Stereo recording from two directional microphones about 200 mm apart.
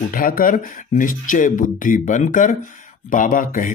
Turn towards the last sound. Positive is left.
turn(degrees=40)  # may be behind; listen again after turning